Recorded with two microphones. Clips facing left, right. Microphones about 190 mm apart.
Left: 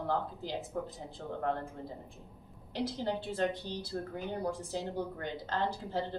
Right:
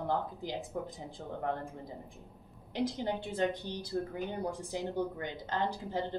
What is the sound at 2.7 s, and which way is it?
A woman's voice, 15° right (ahead or behind).